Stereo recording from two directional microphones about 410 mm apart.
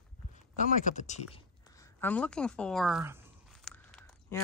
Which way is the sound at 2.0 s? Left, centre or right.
Centre.